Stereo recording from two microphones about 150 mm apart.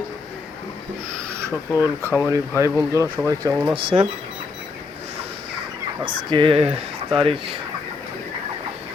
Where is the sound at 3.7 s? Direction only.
40° right (ahead or behind).